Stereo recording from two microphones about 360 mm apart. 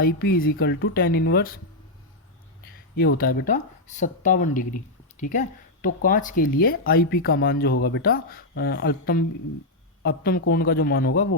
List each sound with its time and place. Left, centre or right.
0.0 s speech: left
2.9 s speech: left